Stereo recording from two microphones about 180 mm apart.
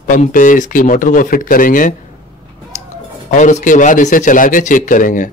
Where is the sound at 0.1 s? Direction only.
50° left (ahead or behind).